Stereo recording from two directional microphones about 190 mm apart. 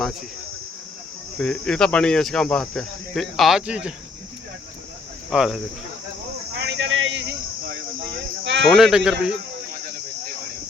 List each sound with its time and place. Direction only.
1.4 s speech: 5° left (ahead or behind)
5.3 s speech: centre (ahead or behind)
6.6 s a sound: 65° right (ahead or behind)
8.6 s speech: centre (ahead or behind)